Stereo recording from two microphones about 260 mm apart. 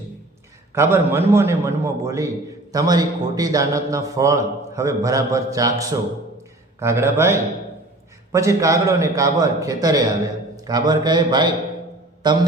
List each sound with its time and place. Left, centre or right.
0.7 s a man's voice: centre